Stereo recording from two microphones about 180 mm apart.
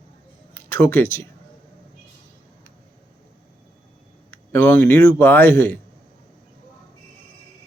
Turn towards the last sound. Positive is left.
turn(degrees=10)  # may be behind; listen again after turning